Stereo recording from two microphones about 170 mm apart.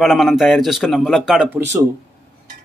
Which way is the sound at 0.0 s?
Centre (ahead or behind).